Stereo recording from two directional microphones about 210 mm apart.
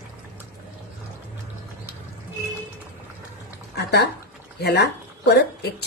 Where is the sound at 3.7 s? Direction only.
50° left (ahead or behind).